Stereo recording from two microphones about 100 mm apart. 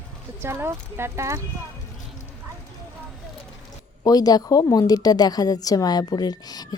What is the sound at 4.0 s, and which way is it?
A woman's voice, 40° left (ahead or behind).